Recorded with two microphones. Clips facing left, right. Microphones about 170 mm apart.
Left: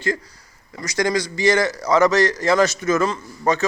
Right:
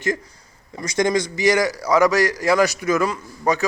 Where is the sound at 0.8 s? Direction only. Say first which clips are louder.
Right 1 dB; 20° right (ahead or behind).